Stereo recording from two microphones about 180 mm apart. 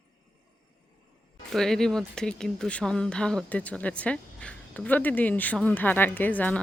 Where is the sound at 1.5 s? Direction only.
Centre (ahead or behind).